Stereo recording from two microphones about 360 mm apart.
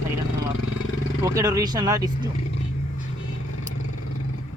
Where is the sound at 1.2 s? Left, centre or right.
Centre.